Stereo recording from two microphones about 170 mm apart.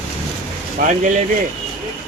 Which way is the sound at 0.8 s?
50° right (ahead or behind).